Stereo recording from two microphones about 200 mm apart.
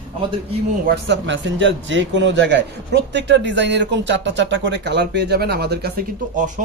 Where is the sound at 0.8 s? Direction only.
65° right (ahead or behind).